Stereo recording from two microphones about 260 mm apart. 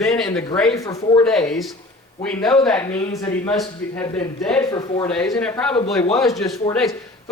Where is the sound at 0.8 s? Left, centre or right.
Centre.